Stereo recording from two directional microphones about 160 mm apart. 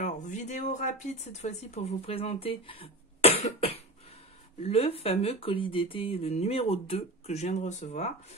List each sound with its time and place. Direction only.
0.0 s speech: 50° left (ahead or behind)